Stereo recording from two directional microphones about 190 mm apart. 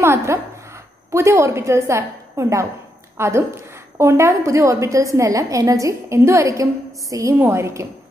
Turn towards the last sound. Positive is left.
turn(degrees=-15)  # may be behind; listen again after turning